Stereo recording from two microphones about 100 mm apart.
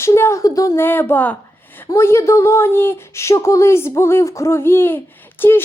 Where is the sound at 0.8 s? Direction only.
20° left (ahead or behind).